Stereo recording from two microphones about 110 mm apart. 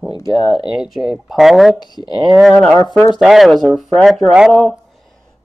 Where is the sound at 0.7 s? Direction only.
5° right (ahead or behind).